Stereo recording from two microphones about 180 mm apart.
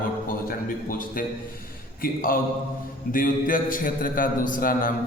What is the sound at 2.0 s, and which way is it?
A man's voice, 50° left (ahead or behind).